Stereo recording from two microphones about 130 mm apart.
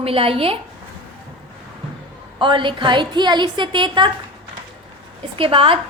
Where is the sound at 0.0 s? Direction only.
45° right (ahead or behind).